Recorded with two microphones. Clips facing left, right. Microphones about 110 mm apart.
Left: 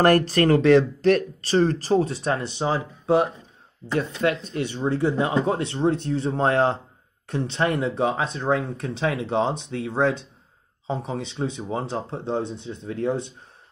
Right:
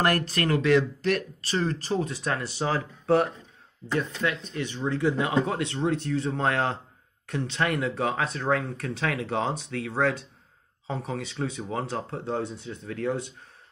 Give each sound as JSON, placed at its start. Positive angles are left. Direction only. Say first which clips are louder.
{"t": 0.0, "sound": "speech", "louder": "left 7 dB", "side_deg": 40}
{"t": 4.0, "sound": "speech", "louder": "left 5 dB", "side_deg": 30}